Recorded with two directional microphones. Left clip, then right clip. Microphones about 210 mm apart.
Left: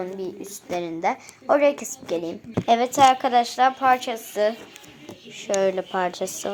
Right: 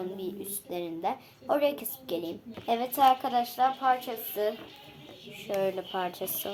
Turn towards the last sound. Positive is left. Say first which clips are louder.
# left 8 dB
turn(degrees=20)  # may be behind; listen again after turning